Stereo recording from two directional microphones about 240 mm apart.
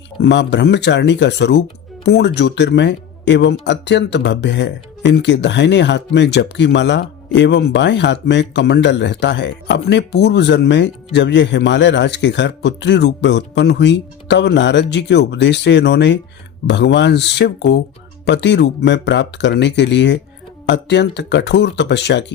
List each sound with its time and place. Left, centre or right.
0.2 s speech: left